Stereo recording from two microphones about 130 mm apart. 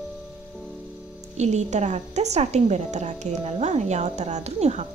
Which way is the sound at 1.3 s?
60° right (ahead or behind).